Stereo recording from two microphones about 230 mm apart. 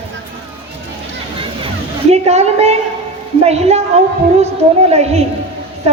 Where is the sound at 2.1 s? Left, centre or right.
Right.